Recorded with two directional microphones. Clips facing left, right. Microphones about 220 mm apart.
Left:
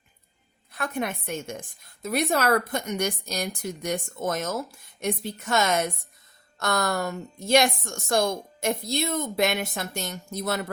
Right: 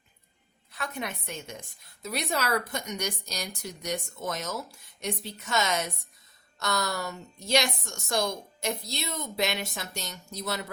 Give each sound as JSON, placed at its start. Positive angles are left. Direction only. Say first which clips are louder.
{"t": 0.7, "sound": "a woman's voice", "louder": "left 6 dB", "side_deg": 50}